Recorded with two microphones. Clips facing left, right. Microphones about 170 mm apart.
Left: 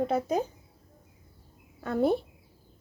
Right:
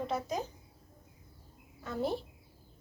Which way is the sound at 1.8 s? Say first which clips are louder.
Left 8 dB; 60° left (ahead or behind).